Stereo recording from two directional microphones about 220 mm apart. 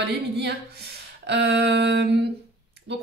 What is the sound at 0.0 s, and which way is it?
A woman's voice, 50° right (ahead or behind).